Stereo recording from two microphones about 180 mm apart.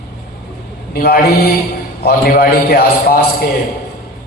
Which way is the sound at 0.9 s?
60° left (ahead or behind).